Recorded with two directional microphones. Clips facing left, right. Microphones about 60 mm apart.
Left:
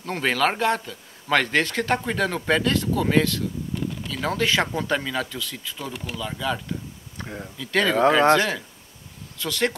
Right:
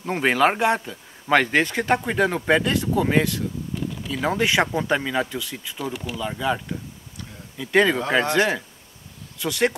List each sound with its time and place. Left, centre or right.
0.0 s speech: centre
7.2 s a sound: left
7.5 s speech: centre